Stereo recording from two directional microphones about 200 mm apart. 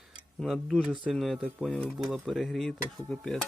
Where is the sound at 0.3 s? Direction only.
Centre (ahead or behind).